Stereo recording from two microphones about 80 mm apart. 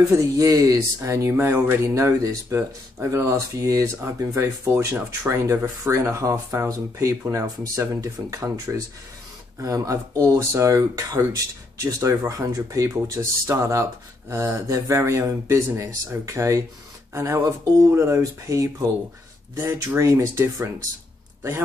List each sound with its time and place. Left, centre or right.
0.2 s speech: right
1.3 s speech: right
19.5 s a man's voice: right